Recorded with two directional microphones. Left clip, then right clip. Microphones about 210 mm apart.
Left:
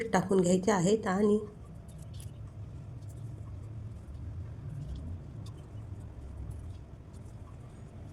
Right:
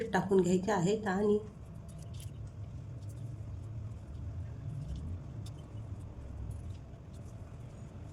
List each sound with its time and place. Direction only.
0.0 s a woman's voice: 25° left (ahead or behind)